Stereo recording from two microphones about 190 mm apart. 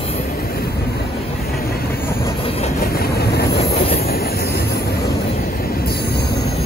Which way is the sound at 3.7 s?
35° left (ahead or behind).